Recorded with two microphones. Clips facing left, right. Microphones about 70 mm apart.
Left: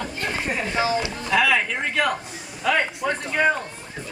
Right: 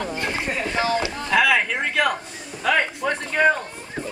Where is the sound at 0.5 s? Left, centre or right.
Centre.